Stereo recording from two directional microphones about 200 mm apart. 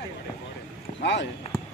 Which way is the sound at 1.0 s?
60° left (ahead or behind).